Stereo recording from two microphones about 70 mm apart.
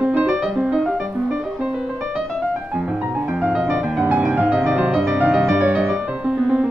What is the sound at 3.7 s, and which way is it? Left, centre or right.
Music, right.